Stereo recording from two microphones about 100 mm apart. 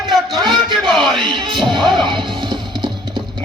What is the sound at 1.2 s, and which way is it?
Music, 55° right (ahead or behind).